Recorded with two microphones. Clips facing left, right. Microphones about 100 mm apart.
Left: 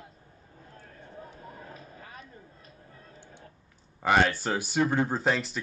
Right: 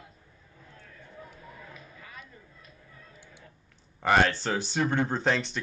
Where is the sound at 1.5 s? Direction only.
40° left (ahead or behind).